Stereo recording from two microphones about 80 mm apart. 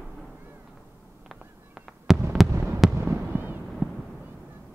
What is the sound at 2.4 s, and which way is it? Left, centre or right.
Heart sounds, centre.